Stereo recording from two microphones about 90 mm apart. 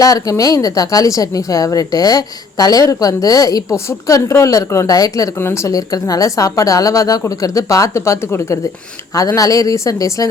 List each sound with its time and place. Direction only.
0.0 s a woman's voice: 40° left (ahead or behind)
5.4 s a woman's voice: 30° left (ahead or behind)
9.1 s a woman's voice: 40° left (ahead or behind)